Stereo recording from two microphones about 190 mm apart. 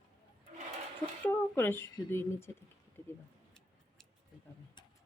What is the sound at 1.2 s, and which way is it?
Speech, 10° left (ahead or behind).